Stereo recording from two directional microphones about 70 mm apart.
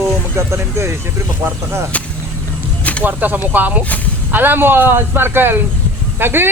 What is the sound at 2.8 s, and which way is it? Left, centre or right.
Snake, left.